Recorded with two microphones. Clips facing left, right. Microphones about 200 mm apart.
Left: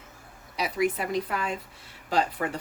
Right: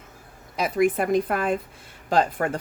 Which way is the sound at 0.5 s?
50° right (ahead or behind).